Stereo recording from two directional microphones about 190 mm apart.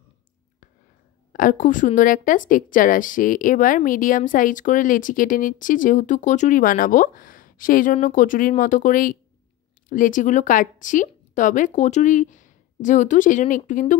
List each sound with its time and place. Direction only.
1.3 s a woman's voice: 45° left (ahead or behind)